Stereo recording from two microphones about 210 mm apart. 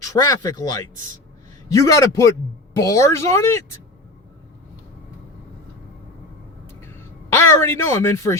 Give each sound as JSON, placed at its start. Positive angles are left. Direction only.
{"t": 0.0, "sound": "a woman's voice", "side_deg": 15}
{"t": 7.3, "sound": "a woman's voice", "side_deg": 10}